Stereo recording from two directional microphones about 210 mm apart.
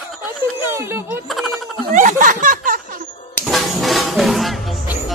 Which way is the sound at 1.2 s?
Centre (ahead or behind).